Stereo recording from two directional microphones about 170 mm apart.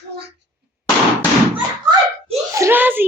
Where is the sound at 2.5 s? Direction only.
15° right (ahead or behind).